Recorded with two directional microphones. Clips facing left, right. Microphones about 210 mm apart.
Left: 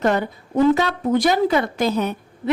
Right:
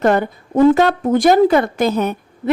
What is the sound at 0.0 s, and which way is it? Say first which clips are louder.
A woman's voice: right 4 dB; 50° right (ahead or behind).